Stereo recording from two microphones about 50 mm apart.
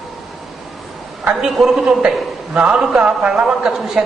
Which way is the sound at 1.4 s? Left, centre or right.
Centre.